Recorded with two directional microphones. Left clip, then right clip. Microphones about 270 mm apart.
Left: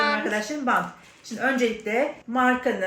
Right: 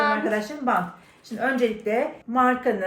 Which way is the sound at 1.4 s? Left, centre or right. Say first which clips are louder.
Even; centre.